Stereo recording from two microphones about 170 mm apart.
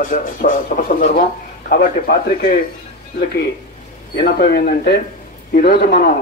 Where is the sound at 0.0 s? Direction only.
55° left (ahead or behind).